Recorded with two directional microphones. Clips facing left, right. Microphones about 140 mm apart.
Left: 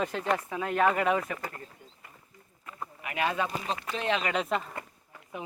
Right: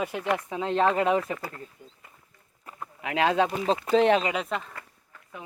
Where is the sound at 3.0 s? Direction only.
90° right.